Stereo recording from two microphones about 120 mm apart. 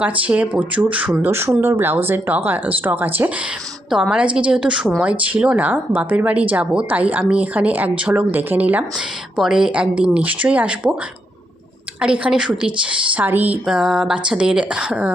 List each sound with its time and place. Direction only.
0.0 s speech: 10° right (ahead or behind)
11.9 s speech: 10° right (ahead or behind)